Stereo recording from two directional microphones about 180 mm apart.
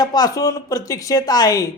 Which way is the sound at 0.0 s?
20° left (ahead or behind).